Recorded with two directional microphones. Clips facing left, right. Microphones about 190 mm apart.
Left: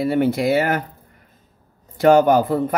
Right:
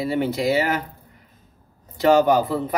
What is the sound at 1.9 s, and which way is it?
Speech, 50° left (ahead or behind).